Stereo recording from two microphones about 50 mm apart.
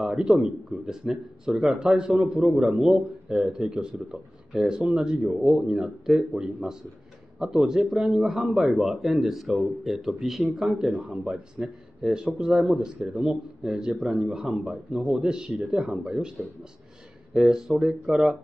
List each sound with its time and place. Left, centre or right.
0.0 s speech: centre
4.6 s a man's voice: centre
11.0 s speech: centre
17.4 s speech: centre